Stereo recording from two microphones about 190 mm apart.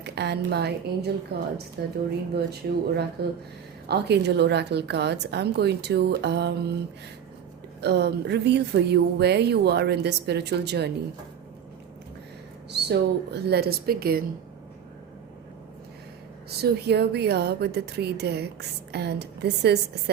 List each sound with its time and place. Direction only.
0.0 s speech: 60° right (ahead or behind)
7.8 s speech: 60° right (ahead or behind)
12.7 s speech: 60° right (ahead or behind)
16.6 s speech: 60° right (ahead or behind)